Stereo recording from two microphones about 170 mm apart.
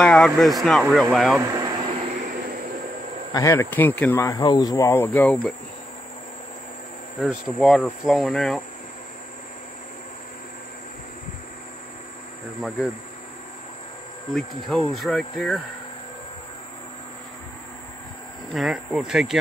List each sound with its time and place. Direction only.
0.0 s insect: centre (ahead or behind)
1.4 s air conditioning: 20° right (ahead or behind)
3.3 s speech: 20° left (ahead or behind)
4.2 s speech: 20° left (ahead or behind)
5.2 s insect: 5° left (ahead or behind)
7.2 s insect: centre (ahead or behind)
12.6 s insect: centre (ahead or behind)
14.3 s insect: centre (ahead or behind)
18.5 s insect: centre (ahead or behind)